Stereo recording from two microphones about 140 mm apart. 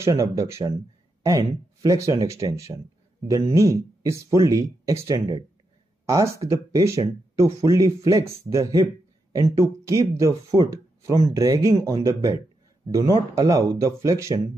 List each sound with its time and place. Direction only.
0.0 s speech: 25° right (ahead or behind)